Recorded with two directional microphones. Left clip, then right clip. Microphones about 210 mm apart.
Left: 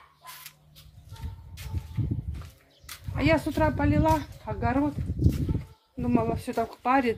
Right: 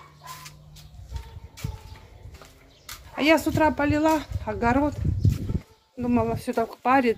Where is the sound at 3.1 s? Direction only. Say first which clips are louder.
Right 4 dB; 15° right (ahead or behind).